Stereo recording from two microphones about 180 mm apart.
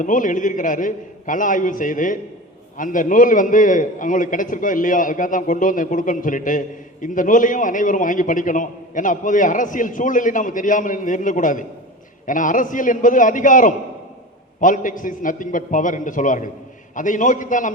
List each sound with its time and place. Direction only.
0.0 s a man's voice: 45° left (ahead or behind)